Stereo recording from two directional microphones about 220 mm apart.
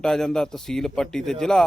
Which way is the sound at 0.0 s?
Centre (ahead or behind).